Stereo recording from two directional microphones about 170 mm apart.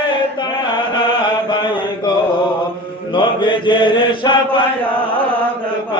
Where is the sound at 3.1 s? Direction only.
25° left (ahead or behind).